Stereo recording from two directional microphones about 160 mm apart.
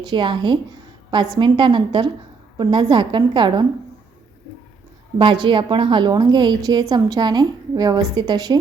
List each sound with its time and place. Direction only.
0.0 s a woman's voice: 30° right (ahead or behind)
5.1 s a woman's voice: 30° right (ahead or behind)